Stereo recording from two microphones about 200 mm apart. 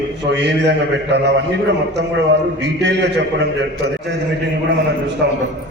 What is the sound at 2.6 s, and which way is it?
Speech, 60° right (ahead or behind).